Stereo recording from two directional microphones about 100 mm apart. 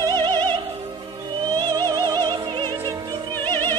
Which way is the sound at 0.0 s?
45° right (ahead or behind).